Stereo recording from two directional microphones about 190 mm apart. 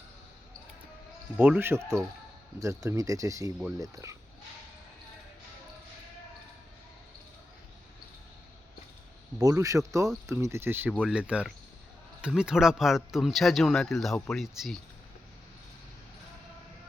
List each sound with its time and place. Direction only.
1.4 s speech: 10° right (ahead or behind)
9.4 s speech: 15° right (ahead or behind); by 14.8 s centre (ahead or behind)